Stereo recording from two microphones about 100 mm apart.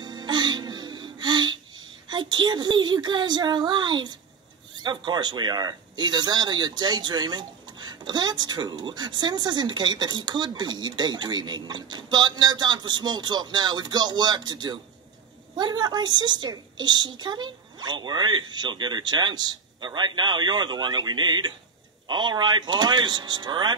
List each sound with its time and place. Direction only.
0.0 s music: 45° right (ahead or behind)
4.7 s speech: 45° right (ahead or behind)